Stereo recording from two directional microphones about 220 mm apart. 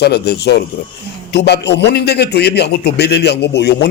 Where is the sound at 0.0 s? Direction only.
50° left (ahead or behind).